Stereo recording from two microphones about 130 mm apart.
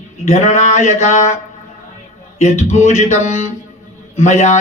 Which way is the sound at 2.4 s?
60° left (ahead or behind).